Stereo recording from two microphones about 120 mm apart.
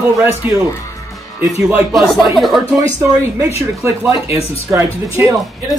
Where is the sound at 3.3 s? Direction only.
20° right (ahead or behind).